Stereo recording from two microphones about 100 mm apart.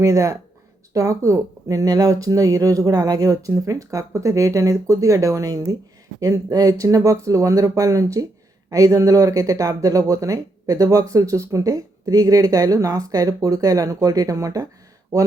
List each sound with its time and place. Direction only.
0.0 s speech: 30° right (ahead or behind)